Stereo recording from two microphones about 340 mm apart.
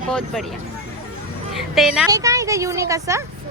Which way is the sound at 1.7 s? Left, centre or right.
Centre.